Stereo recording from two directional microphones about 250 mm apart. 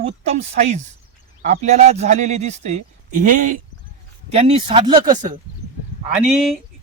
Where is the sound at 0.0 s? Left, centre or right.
Right.